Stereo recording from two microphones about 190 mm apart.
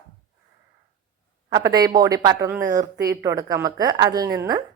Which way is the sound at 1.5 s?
20° right (ahead or behind).